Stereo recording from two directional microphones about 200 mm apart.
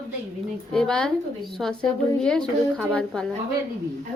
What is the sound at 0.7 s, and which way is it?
A woman's voice, 5° left (ahead or behind).